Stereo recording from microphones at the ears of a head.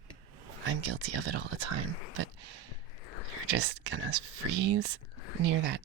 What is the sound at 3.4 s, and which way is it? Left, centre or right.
Speech, right.